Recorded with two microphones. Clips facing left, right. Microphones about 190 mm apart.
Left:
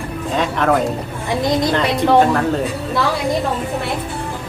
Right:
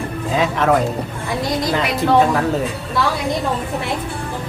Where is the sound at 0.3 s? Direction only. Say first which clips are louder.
Even; centre (ahead or behind).